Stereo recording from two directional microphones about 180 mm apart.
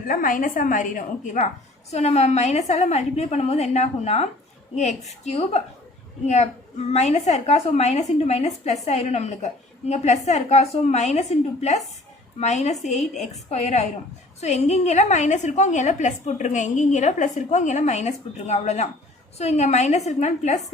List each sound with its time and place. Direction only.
0.1 s a woman's voice: 50° left (ahead or behind)